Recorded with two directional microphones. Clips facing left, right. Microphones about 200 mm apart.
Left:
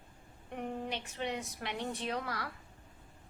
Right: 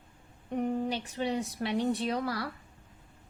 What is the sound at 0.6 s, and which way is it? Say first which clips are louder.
A woman's voice: right 8 dB; 35° right (ahead or behind).